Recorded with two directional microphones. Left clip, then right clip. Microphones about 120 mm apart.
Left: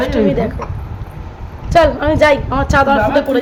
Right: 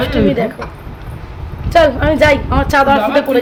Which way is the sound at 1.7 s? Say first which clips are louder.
Right 1 dB; 10° right (ahead or behind).